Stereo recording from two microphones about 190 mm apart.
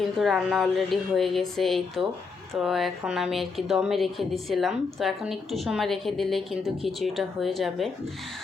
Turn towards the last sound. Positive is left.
turn(degrees=0)  # may be behind; listen again after turning